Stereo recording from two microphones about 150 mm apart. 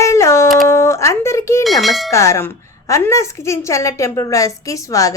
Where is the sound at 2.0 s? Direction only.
20° left (ahead or behind).